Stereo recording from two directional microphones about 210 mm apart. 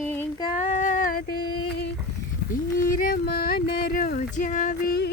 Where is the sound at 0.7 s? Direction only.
40° left (ahead or behind).